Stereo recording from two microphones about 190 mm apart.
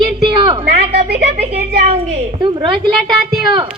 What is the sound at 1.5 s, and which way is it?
Speech, 60° right (ahead or behind).